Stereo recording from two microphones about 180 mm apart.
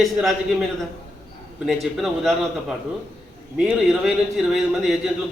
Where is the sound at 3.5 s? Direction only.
5° right (ahead or behind).